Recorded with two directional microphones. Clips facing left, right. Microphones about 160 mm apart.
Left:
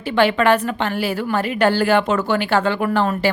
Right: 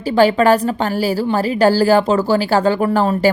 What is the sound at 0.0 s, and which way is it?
A woman's voice, 40° right (ahead or behind).